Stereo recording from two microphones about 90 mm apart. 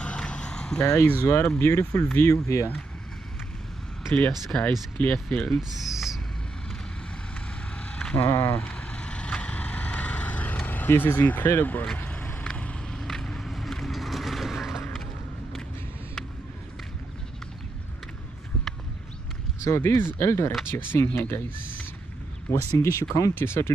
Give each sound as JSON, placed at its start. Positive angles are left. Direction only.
{"t": 0.0, "sound": "a sound", "side_deg": 10}
{"t": 0.7, "sound": "speech", "side_deg": 40}
{"t": 1.2, "sound": "speech", "side_deg": 25}
{"t": 4.3, "sound": "speech", "side_deg": 5}
{"t": 4.9, "sound": "speech", "side_deg": 15}
{"t": 5.6, "sound": "a sound", "side_deg": -5}
{"t": 7.7, "sound": "a sound", "side_deg": 15}
{"t": 8.3, "sound": "speech", "side_deg": 25}
{"t": 8.5, "sound": "vehicle", "side_deg": 15}
{"t": 11.8, "sound": "vehicle", "side_deg": 10}
{"t": 19.6, "sound": "speech", "side_deg": 30}
{"t": 22.5, "sound": "speech", "side_deg": 30}
{"t": 22.9, "sound": "speech", "side_deg": 40}
{"t": 23.3, "sound": "speech", "side_deg": 25}